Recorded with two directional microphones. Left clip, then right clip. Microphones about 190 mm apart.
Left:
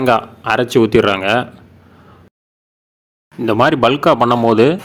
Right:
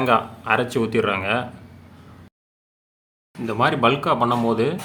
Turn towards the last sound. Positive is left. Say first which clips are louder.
# left 9 dB
turn(degrees=35)  # may be behind; listen again after turning